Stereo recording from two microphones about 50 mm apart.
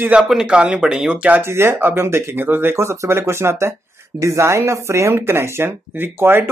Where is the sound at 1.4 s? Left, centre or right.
Right.